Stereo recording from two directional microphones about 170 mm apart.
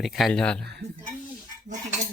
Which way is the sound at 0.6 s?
75° right (ahead or behind).